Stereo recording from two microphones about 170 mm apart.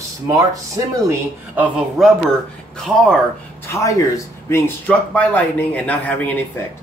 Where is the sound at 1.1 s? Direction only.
10° right (ahead or behind).